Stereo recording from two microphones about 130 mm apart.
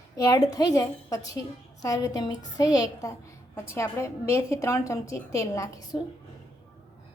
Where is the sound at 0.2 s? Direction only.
25° left (ahead or behind).